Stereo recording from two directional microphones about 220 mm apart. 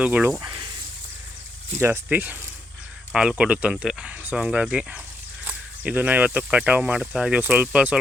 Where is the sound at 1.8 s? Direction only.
10° right (ahead or behind).